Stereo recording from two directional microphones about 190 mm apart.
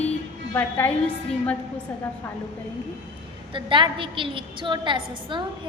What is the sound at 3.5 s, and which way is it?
A woman's voice, 25° right (ahead or behind).